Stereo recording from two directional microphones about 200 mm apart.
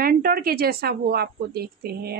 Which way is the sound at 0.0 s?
45° right (ahead or behind).